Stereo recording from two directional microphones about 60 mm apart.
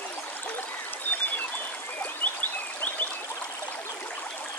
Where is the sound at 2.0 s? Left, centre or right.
Left.